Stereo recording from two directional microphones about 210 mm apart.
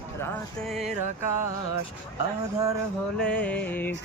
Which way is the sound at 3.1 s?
5° left (ahead or behind).